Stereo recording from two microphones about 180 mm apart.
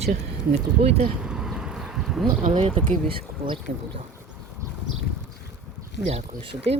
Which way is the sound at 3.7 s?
50° right (ahead or behind).